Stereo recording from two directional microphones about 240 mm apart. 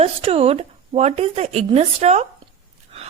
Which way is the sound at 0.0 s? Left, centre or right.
Right.